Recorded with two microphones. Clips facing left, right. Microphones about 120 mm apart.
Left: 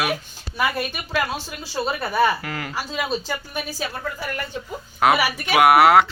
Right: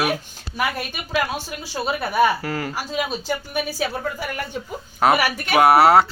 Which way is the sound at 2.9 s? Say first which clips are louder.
Right 1 dB; 5° right (ahead or behind).